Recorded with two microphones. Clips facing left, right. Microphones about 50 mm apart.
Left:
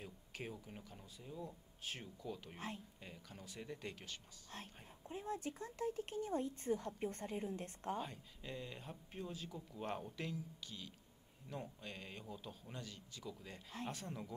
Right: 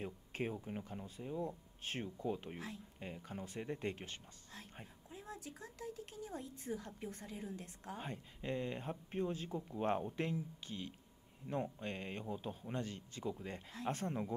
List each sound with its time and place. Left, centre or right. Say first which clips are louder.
0.0 s speech: right 8 dB; right
1.4 s speech: right 6 dB; right
5.1 s a woman's voice: left 6 dB; left
8.0 s speech: right 2 dB; right